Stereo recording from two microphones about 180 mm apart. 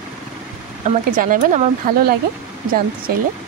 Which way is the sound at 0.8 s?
50° right (ahead or behind).